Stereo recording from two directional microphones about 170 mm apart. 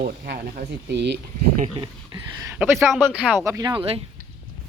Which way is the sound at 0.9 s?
90° right.